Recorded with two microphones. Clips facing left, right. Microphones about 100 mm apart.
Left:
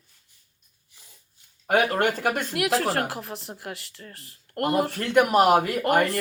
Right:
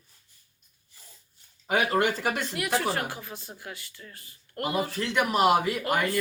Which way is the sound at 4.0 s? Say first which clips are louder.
Left 3 dB; 35° left (ahead or behind).